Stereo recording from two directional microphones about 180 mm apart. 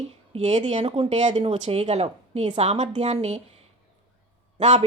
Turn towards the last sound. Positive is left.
turn(degrees=-40)  # may be behind; listen again after turning